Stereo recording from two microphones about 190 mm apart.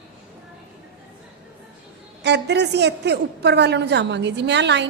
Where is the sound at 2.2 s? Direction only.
65° right (ahead or behind).